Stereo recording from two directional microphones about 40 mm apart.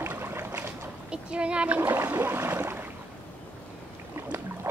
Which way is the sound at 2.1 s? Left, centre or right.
Right.